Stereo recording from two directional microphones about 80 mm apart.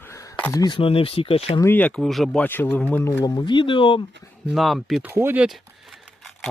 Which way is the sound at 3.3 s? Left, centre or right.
Left.